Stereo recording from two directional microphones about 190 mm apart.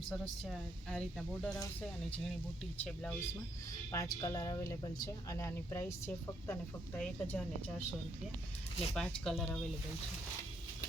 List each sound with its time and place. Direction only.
0.1 s speech: centre (ahead or behind)
3.9 s speech: 20° left (ahead or behind)
9.0 s speech: centre (ahead or behind)